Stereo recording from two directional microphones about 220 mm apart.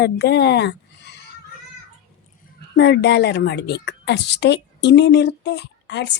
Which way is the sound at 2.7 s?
50° left (ahead or behind).